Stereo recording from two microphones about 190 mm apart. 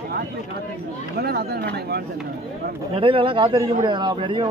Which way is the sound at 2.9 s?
25° right (ahead or behind).